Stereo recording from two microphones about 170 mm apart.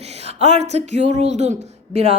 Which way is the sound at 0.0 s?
40° right (ahead or behind).